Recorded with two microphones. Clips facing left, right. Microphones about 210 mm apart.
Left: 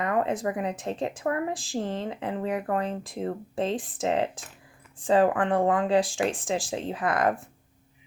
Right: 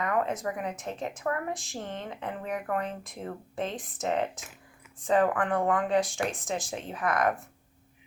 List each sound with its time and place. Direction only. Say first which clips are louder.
0.0 s speech: left 3 dB; 30° left (ahead or behind)